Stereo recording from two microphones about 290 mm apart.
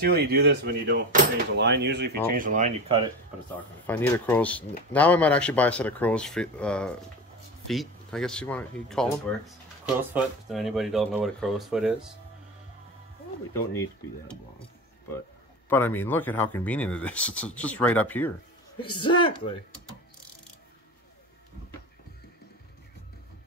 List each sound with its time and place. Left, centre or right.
0.0 s speech: right
3.5 s speech: centre
13.5 s speech: centre
15.7 s speech: centre
18.8 s speech: centre